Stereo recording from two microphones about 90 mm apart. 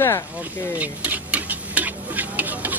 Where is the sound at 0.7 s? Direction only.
15° right (ahead or behind).